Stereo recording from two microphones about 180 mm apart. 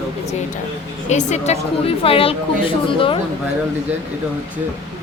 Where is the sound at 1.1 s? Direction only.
40° left (ahead or behind).